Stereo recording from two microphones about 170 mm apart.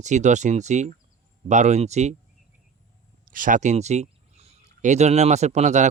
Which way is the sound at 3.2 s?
55° right (ahead or behind).